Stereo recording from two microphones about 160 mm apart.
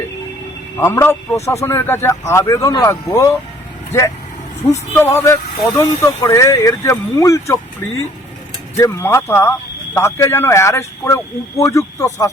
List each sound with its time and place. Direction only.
0.8 s speech: 15° left (ahead or behind)
4.7 s speech: 15° left (ahead or behind)
8.8 s speech: 15° left (ahead or behind)